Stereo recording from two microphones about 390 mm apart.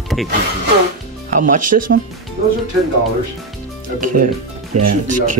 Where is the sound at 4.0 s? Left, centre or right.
Right.